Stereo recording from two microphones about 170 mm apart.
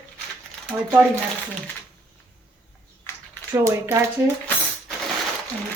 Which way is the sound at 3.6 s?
15° right (ahead or behind).